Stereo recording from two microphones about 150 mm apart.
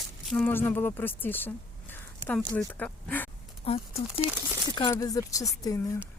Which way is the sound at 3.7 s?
40° left (ahead or behind).